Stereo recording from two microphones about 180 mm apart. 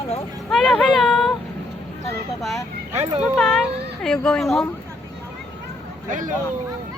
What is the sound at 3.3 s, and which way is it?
Speech, 5° left (ahead or behind).